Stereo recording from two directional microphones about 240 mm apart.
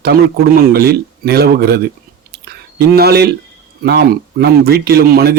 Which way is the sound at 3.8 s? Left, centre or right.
Right.